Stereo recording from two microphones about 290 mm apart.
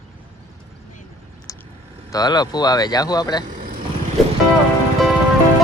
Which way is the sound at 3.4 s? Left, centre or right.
Right.